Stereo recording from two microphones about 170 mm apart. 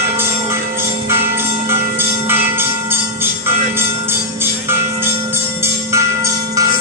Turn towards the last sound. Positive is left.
turn(degrees=-15)  # may be behind; listen again after turning